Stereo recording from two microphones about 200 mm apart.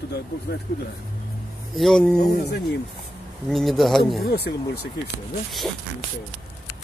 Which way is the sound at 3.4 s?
Centre (ahead or behind).